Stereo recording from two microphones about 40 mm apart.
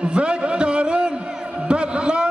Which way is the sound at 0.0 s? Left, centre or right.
Right.